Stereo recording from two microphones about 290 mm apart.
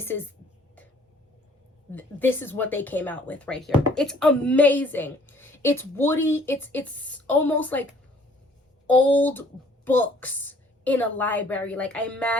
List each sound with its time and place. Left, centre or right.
2.0 s speech: centre